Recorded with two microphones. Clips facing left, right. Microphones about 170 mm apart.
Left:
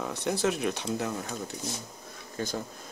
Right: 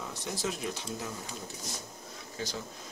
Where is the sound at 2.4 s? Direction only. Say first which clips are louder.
Left 5 dB; 50° left (ahead or behind).